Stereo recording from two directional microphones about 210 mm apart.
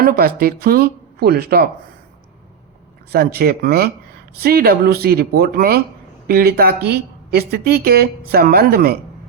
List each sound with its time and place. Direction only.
0.0 s a woman's voice: 45° right (ahead or behind)
3.1 s a woman's voice: 45° right (ahead or behind)